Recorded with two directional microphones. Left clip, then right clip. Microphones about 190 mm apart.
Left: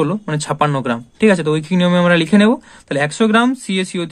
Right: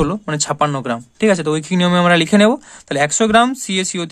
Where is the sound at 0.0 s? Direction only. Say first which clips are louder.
Even; 25° right (ahead or behind).